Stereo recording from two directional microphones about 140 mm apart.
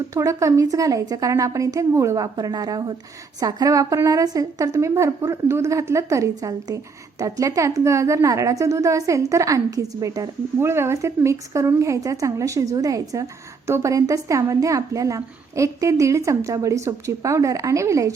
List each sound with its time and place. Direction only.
0.1 s a woman's voice: 25° right (ahead or behind)